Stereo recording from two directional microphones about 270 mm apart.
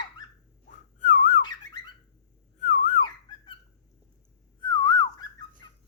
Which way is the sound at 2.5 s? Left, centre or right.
Left.